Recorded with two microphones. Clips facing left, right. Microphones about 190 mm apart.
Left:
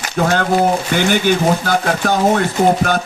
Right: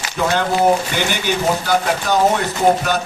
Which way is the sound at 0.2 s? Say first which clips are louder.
Left 2 dB; 50° left (ahead or behind).